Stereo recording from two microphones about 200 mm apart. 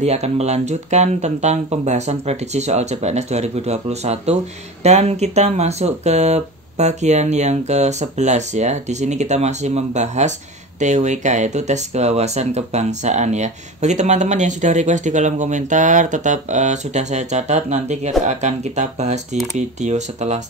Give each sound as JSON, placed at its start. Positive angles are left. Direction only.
{"t": 0.0, "sound": "speech", "side_deg": -30}